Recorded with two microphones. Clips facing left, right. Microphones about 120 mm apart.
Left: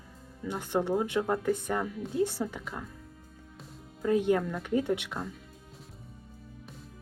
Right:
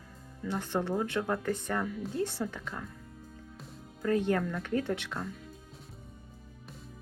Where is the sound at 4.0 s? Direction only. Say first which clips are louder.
Left 2 dB; 10° left (ahead or behind).